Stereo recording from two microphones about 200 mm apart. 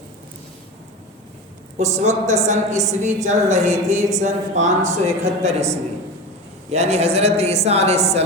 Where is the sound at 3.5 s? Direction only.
35° right (ahead or behind).